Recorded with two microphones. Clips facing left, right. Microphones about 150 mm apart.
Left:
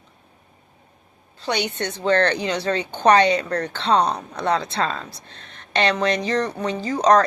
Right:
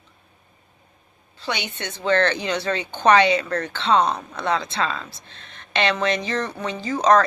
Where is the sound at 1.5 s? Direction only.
40° left (ahead or behind).